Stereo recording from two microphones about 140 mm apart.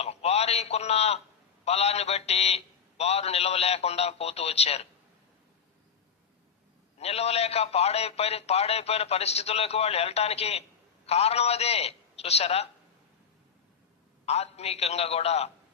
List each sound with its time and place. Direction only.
0.0 s a sound: 50° left (ahead or behind)
1.6 s a man's voice: 50° left (ahead or behind)
7.0 s a man's voice: 50° left (ahead or behind)
14.3 s a man's voice: 50° left (ahead or behind)